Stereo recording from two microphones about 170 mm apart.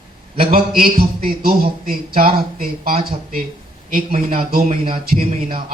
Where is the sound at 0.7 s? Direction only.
60° right (ahead or behind).